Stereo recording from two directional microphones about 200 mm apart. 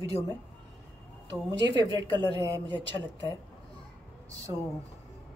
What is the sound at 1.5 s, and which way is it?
A woman's voice, 20° right (ahead or behind).